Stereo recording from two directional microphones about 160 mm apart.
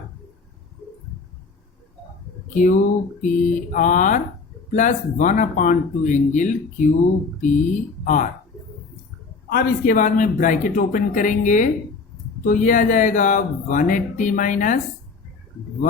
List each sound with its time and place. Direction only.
2.5 s speech: 50° left (ahead or behind)
8.0 s speech: 50° left (ahead or behind)
9.5 s speech: 65° left (ahead or behind)